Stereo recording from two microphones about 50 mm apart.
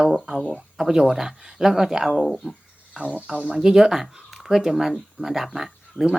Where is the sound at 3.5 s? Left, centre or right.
Centre.